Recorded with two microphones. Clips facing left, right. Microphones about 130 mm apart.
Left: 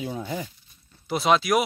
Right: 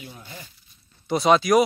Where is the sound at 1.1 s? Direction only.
Centre (ahead or behind).